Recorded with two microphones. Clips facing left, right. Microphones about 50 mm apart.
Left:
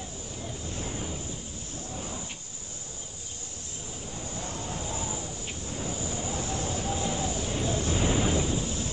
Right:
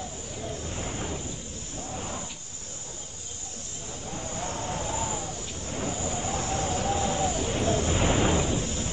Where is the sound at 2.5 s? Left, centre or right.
Left.